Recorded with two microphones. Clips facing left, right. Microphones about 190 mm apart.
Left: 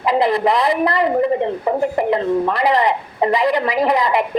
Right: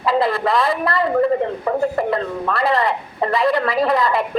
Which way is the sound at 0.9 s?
20° left (ahead or behind).